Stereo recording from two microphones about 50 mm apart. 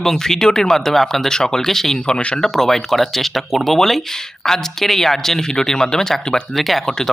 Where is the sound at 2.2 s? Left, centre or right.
Left.